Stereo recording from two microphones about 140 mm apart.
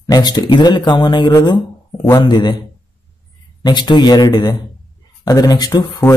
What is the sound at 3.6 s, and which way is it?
A man's voice, 30° left (ahead or behind).